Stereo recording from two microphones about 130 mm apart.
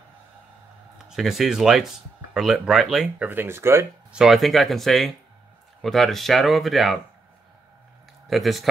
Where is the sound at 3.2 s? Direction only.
15° right (ahead or behind).